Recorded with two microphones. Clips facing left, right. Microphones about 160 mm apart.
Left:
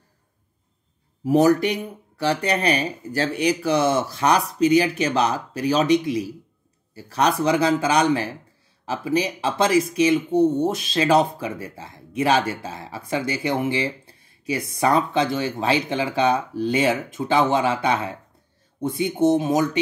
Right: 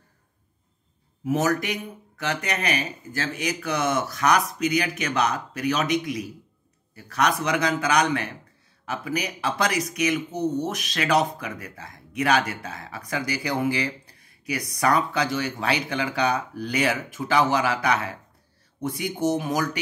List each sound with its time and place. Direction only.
1.2 s speech: 35° left (ahead or behind)